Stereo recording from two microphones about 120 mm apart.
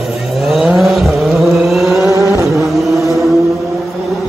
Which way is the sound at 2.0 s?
25° right (ahead or behind).